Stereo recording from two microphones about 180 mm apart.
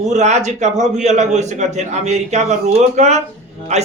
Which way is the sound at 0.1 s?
40° right (ahead or behind).